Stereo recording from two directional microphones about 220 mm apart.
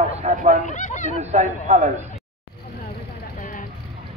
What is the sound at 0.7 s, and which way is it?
Speech, 35° left (ahead or behind).